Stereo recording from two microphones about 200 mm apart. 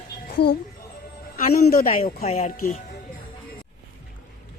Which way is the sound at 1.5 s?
45° left (ahead or behind).